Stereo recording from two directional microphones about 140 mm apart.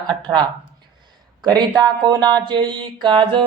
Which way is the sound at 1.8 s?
30° right (ahead or behind).